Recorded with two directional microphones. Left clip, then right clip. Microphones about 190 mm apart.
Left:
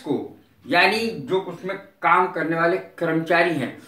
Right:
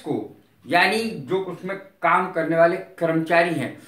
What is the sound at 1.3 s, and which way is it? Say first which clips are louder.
Speech: left 1 dB; 15° right (ahead or behind).